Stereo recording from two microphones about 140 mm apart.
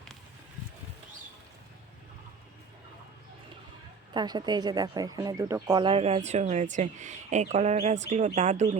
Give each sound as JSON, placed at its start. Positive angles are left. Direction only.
{"t": 4.1, "sound": "speech", "side_deg": -30}
{"t": 5.8, "sound": "speech", "side_deg": -45}